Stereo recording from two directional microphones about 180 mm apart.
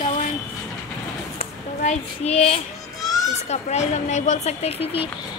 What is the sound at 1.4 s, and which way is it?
A child's voice, 35° left (ahead or behind).